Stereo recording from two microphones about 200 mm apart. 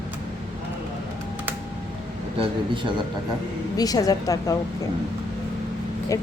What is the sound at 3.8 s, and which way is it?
Speech, 20° left (ahead or behind).